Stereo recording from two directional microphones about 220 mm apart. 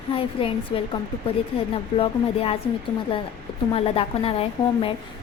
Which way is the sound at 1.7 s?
25° left (ahead or behind).